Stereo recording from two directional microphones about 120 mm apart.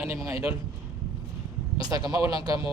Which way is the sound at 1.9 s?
30° right (ahead or behind).